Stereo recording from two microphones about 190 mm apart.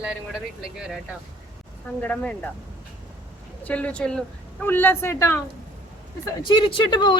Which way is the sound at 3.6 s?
5° left (ahead or behind).